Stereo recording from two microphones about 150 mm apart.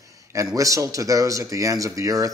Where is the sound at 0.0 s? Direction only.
20° right (ahead or behind).